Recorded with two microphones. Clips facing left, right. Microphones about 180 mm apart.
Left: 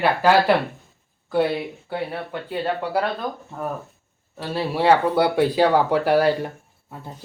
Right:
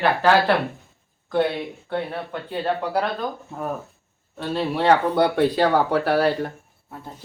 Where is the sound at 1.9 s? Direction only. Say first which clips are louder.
Right 2 dB; 5° left (ahead or behind).